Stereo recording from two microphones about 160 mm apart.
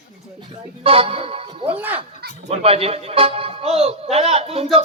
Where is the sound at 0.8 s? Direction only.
35° right (ahead or behind).